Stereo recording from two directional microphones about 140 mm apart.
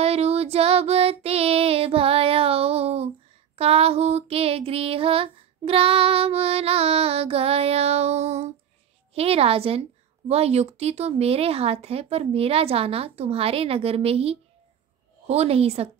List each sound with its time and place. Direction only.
0.0 s child singing: 45° right (ahead or behind)
3.5 s a sound: 45° right (ahead or behind)
9.1 s a woman's voice: 45° right (ahead or behind)